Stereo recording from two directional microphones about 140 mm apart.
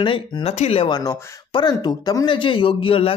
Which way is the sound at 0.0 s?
40° left (ahead or behind).